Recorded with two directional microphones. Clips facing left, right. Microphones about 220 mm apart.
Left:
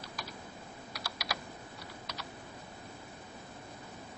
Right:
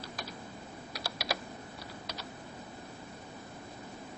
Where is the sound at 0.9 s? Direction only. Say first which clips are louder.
Right 4 dB; 30° right (ahead or behind).